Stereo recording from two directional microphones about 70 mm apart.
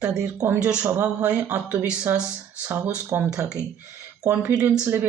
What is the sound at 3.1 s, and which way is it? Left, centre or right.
Speech, right.